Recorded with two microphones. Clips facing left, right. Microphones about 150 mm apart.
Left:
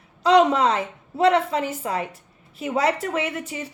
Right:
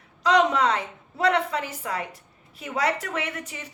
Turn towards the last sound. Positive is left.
turn(degrees=30)  # may be behind; listen again after turning